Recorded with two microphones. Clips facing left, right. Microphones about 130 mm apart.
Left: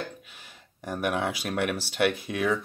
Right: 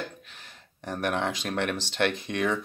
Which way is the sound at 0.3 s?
10° left (ahead or behind).